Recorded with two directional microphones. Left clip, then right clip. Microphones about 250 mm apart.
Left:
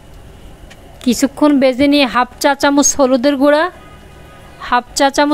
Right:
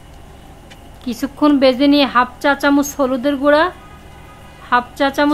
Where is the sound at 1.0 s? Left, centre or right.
Left.